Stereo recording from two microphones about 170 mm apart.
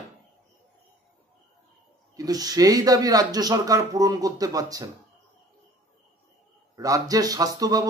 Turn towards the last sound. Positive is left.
turn(degrees=-20)  # may be behind; listen again after turning